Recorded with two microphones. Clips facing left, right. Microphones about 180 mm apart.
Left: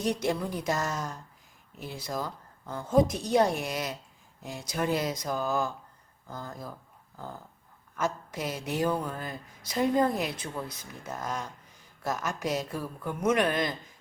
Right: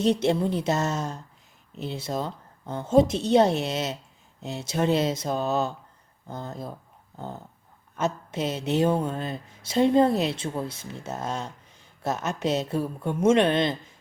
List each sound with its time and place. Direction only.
0.0 s a woman's voice: 25° right (ahead or behind)